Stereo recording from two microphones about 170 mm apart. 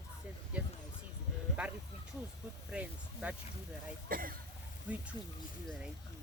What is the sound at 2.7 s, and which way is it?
Speech, 10° right (ahead or behind).